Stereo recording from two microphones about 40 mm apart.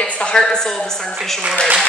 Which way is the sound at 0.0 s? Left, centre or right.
Left.